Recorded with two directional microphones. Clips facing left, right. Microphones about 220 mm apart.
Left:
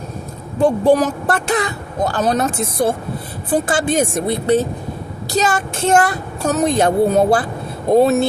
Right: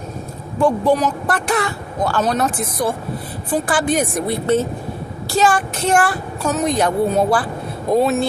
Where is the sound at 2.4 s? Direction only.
25° left (ahead or behind).